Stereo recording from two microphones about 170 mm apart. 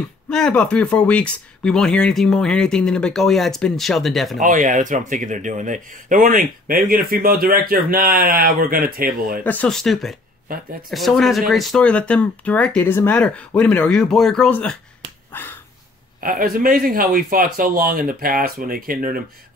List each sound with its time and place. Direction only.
0.3 s speech: 5° left (ahead or behind)
4.4 s speech: 50° right (ahead or behind)
9.4 s speech: 10° left (ahead or behind)
15.3 s finger snapping: 10° left (ahead or behind)
16.2 s speech: 55° right (ahead or behind)